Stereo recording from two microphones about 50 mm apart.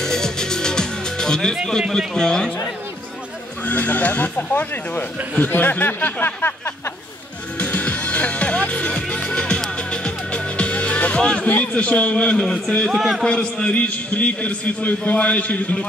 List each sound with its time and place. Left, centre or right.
0.0 s music: centre
1.8 s speech: centre
3.6 s speech: left
7.5 s music: left
11.5 s a man's voice: left
12.4 s speech: centre
12.9 s a man's voice: centre
13.2 s a man's voice: centre